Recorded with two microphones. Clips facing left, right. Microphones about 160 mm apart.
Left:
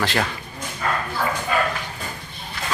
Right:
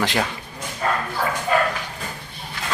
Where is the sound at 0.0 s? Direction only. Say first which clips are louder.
Right 1 dB; 15° right (ahead or behind).